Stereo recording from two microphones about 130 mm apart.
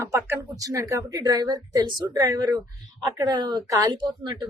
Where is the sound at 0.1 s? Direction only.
20° right (ahead or behind).